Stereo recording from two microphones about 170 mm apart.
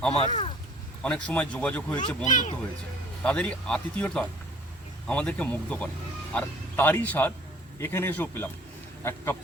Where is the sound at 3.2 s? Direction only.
5° left (ahead or behind).